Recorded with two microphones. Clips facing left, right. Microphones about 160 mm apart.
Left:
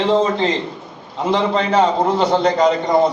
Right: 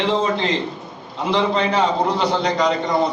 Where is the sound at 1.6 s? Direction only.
45° left (ahead or behind).